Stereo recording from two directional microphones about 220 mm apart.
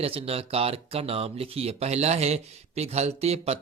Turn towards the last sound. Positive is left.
turn(degrees=-30)  # may be behind; listen again after turning